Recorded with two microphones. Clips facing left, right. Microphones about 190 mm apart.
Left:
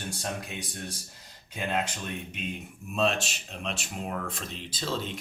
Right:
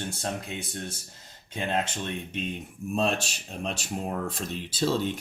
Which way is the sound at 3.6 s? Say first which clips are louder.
Right 4 dB; 35° right (ahead or behind).